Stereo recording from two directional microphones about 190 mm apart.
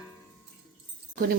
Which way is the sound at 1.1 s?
50° right (ahead or behind).